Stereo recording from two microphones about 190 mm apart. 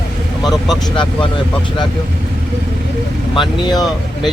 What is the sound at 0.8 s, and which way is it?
Speech, 25° left (ahead or behind).